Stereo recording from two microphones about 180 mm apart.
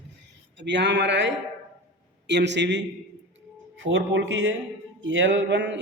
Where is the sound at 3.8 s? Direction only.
90° right.